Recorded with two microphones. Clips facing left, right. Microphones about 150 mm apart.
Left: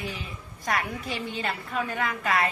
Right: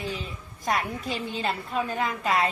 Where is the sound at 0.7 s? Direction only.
20° right (ahead or behind).